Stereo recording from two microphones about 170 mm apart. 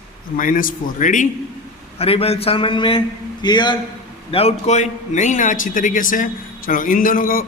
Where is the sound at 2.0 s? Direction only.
35° left (ahead or behind).